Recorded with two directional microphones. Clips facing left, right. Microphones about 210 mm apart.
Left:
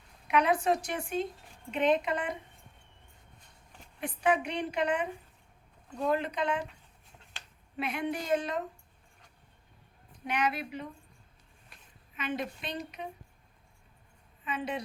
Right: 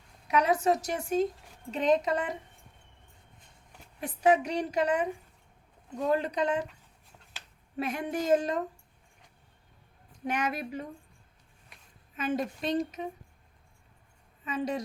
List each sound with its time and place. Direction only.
0.3 s a woman's voice: 40° right (ahead or behind)
4.0 s a woman's voice: 40° right (ahead or behind)
6.1 s a woman's voice: 40° right (ahead or behind)
7.8 s speech: 45° right (ahead or behind)
10.2 s speech: 45° right (ahead or behind)
12.1 s speech: 45° right (ahead or behind)
14.4 s a woman's voice: 40° right (ahead or behind)